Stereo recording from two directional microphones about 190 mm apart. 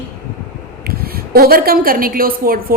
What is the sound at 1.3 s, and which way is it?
A woman's voice, 50° right (ahead or behind).